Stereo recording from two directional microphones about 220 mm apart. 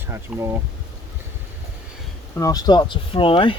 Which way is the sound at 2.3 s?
15° left (ahead or behind).